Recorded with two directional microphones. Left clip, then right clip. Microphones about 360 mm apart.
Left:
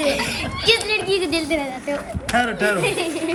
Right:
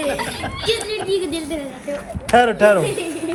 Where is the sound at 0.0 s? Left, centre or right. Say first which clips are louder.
Left 1 dB; centre.